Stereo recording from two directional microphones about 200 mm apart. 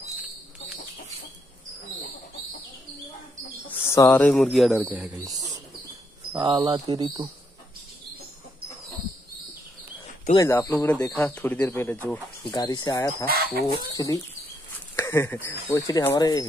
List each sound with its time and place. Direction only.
3.6 s speech: 10° left (ahead or behind); by 5.1 s 5° right (ahead or behind)
6.3 s speech: 20° right (ahead or behind)
10.3 s speech: 15° left (ahead or behind)
13.2 s speech: 50° right (ahead or behind)
13.9 s speech: 15° left (ahead or behind)